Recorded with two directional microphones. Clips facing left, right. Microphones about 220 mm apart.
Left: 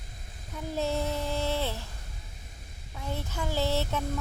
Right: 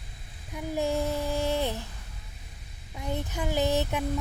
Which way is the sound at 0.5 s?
15° right (ahead or behind).